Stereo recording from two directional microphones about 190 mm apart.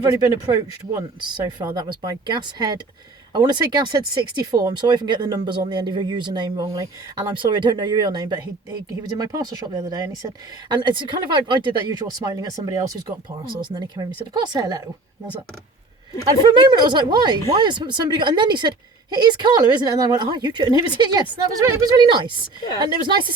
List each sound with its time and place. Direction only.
0.0 s speech: 20° right (ahead or behind)
16.4 s speech: 25° right (ahead or behind)